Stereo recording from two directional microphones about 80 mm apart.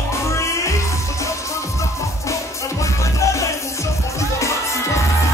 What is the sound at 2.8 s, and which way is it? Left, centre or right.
Music, left.